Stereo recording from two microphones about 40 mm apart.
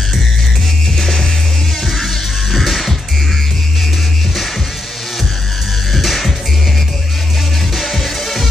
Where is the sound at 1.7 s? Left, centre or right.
Centre.